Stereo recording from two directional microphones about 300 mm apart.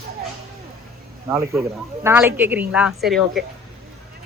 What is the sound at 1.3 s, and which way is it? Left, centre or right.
A woman's voice, centre.